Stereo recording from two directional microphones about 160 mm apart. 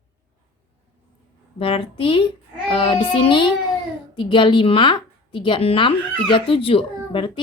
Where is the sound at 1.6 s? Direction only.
35° left (ahead or behind).